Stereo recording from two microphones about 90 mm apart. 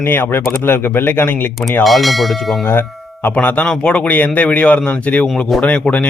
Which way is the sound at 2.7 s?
25° left (ahead or behind).